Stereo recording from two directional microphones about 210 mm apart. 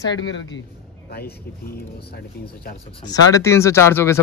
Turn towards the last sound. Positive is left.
turn(degrees=10)  # may be behind; listen again after turning